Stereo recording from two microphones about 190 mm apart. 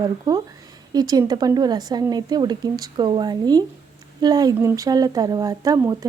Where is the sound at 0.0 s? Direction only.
20° right (ahead or behind).